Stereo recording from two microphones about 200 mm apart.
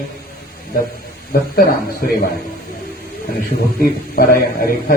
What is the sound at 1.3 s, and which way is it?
Speech, 50° left (ahead or behind).